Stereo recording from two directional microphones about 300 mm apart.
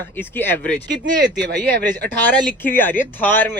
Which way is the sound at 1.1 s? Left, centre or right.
Right.